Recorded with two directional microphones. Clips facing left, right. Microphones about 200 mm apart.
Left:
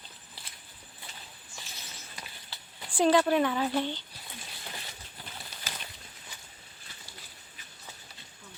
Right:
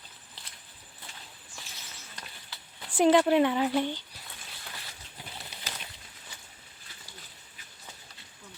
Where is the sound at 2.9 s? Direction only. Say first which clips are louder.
Right 2 dB; 20° right (ahead or behind).